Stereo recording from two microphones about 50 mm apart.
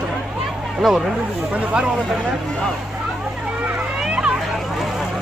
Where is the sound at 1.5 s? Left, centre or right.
Right.